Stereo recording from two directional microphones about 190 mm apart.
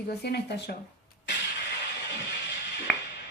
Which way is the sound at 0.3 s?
60° left (ahead or behind).